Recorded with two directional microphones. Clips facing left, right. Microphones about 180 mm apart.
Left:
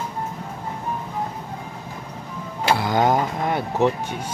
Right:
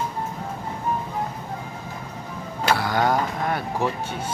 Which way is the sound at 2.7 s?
20° left (ahead or behind).